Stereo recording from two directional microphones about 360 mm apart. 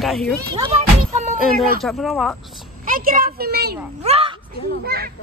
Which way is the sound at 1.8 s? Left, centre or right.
Centre.